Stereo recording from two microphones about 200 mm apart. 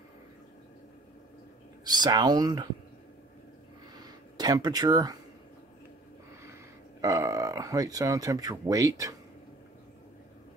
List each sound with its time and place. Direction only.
1.9 s speech: 20° right (ahead or behind)
3.9 s a sound: 20° right (ahead or behind)
7.0 s speech: 15° right (ahead or behind)